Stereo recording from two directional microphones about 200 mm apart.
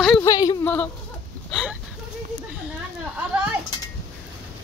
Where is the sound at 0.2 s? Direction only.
15° left (ahead or behind); by 1.8 s centre (ahead or behind).